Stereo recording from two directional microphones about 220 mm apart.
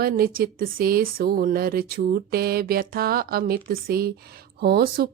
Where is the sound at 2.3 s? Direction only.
45° right (ahead or behind).